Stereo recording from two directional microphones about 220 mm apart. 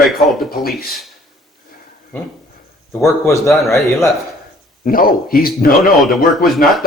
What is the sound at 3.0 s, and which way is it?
A man's voice, 10° left (ahead or behind).